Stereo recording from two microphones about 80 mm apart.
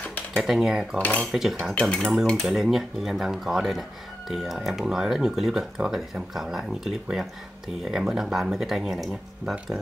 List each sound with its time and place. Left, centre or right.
0.0 s a sound: centre
0.4 s speech: centre
0.9 s speech: centre
1.3 s speech: centre
1.8 s cutlery: centre
2.4 s speech: centre